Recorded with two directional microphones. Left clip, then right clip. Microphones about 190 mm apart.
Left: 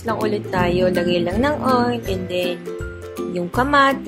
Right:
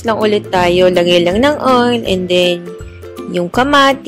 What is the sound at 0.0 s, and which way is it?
Speech, 40° right (ahead or behind).